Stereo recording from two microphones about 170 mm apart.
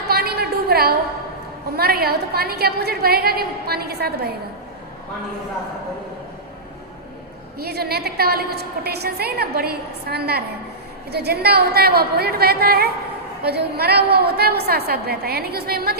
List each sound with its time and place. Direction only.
0.1 s a sound: 65° right (ahead or behind)
1.7 s a woman's voice: 65° right (ahead or behind)
7.6 s a woman's voice: 70° right (ahead or behind)